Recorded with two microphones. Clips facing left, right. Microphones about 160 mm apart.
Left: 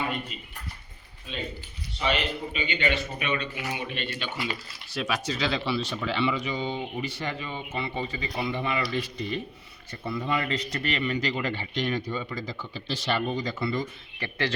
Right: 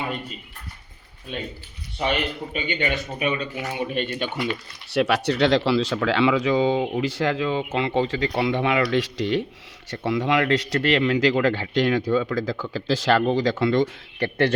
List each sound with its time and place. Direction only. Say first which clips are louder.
1.3 s a man's voice: right 3 dB; 50° right (ahead or behind)
4.9 s speech: right 9 dB; 70° right (ahead or behind)